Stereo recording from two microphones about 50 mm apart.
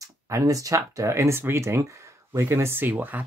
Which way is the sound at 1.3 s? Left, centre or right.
Right.